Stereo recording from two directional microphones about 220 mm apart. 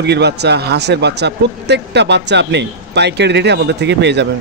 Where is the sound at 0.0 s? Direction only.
50° right (ahead or behind).